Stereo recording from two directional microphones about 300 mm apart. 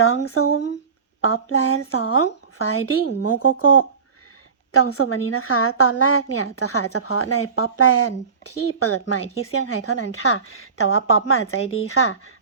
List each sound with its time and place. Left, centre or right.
0.0 s a woman's voice: left